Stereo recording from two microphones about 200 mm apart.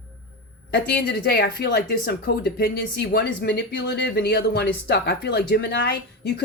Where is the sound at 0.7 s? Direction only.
55° left (ahead or behind).